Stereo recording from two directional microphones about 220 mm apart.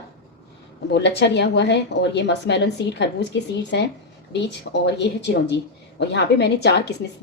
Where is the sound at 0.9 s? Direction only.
50° left (ahead or behind).